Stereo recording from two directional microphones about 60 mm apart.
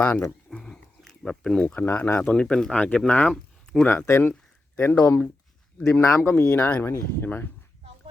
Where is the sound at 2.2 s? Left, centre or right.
Centre.